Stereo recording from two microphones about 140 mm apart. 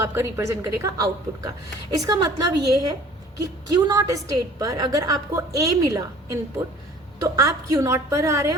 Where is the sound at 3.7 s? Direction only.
25° right (ahead or behind).